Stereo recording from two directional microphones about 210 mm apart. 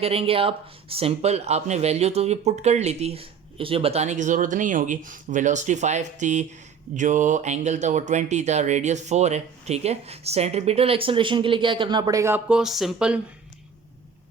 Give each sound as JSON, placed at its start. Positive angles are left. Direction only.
{"t": 0.0, "sound": "speech", "side_deg": -25}